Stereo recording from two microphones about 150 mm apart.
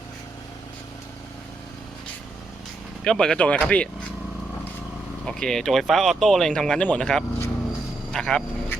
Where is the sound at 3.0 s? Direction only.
5° left (ahead or behind).